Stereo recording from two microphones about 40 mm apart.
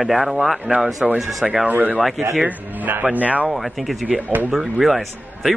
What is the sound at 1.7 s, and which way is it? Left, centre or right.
A man's voice, right.